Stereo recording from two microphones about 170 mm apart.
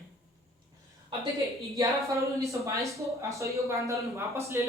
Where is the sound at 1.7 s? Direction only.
20° right (ahead or behind).